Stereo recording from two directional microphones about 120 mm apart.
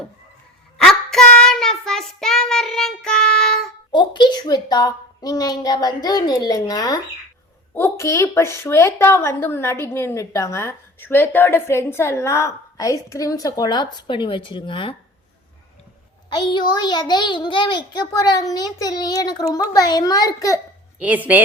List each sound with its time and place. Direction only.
0.8 s child singing: 5° left (ahead or behind)
3.9 s a child's voice: 40° left (ahead or behind)
7.7 s a woman's voice: 20° left (ahead or behind); by 14.9 s 45° left (ahead or behind)
16.3 s a child's voice: 40° left (ahead or behind)
21.0 s a woman's voice: 15° right (ahead or behind)